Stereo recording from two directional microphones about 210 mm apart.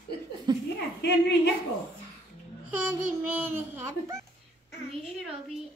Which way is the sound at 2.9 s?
5° right (ahead or behind).